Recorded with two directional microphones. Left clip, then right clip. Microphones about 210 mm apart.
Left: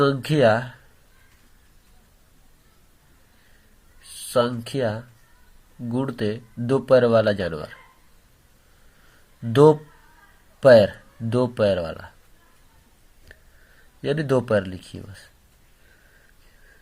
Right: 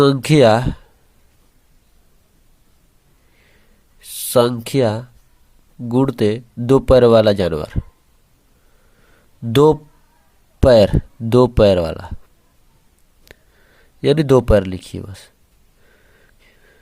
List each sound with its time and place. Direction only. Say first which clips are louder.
0.0 s speech: right 6 dB; 45° right (ahead or behind)
4.3 s speech: right 7 dB; 45° right (ahead or behind)
9.5 s speech: right 2 dB; 50° right (ahead or behind)
14.0 s speech: right 9 dB; 45° right (ahead or behind)